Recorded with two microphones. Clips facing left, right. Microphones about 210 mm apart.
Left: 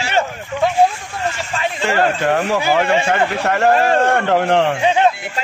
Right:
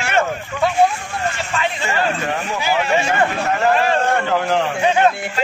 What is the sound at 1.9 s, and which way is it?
Speech, 70° left (ahead or behind).